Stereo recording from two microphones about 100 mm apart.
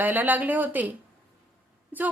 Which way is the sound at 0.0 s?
20° right (ahead or behind).